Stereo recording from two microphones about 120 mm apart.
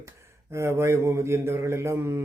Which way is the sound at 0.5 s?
20° right (ahead or behind).